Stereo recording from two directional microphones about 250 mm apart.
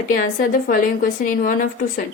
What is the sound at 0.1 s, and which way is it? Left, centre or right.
A woman's voice, left.